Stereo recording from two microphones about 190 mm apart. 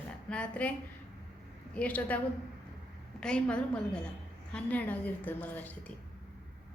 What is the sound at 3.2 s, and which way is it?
A woman's voice, 5° left (ahead or behind).